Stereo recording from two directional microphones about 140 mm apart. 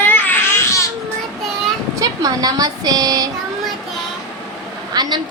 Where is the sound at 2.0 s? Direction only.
25° right (ahead or behind).